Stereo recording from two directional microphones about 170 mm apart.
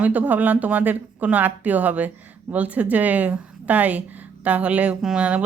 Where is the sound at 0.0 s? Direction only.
10° right (ahead or behind).